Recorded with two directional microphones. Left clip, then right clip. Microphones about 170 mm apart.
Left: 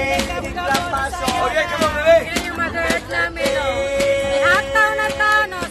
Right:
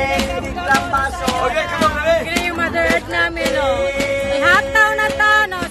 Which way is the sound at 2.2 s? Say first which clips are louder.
Right 3 dB; 40° right (ahead or behind).